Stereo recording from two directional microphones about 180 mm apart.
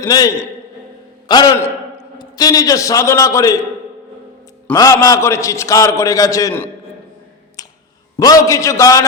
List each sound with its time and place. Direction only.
0.0 s a man's voice: 20° left (ahead or behind)
4.7 s a man's voice: 20° left (ahead or behind)
7.6 s a sound: 20° left (ahead or behind)
8.2 s a man's voice: 20° left (ahead or behind)